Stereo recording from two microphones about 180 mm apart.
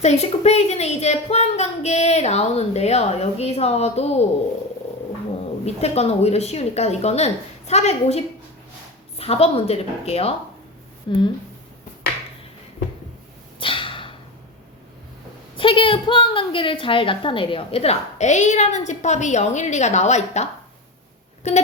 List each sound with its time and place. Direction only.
0.0 s a woman's voice: 35° left (ahead or behind)
5.6 s a woman's voice: 35° left (ahead or behind)
13.6 s a sound: 30° left (ahead or behind)
15.5 s a woman's voice: 30° left (ahead or behind)